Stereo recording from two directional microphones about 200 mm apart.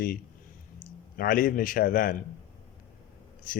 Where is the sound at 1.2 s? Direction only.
45° left (ahead or behind).